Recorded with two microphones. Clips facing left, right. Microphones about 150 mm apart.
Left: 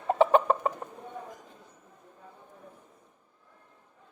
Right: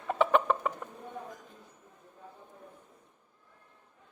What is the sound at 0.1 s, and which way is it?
Chicken, 35° left (ahead or behind).